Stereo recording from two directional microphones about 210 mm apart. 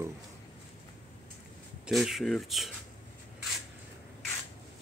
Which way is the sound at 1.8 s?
Centre (ahead or behind).